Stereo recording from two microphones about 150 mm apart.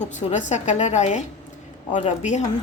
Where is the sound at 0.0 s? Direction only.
55° left (ahead or behind).